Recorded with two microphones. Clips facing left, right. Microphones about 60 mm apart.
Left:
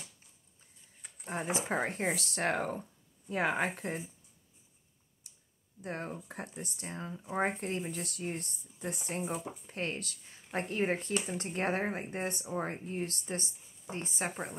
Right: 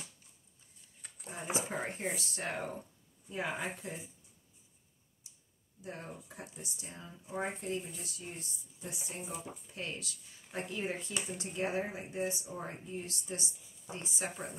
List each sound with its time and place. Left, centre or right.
1.2 s speech: left
5.2 s clicking: left
5.8 s speech: left